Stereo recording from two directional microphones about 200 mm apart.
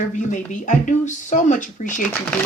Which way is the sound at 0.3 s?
40° left (ahead or behind).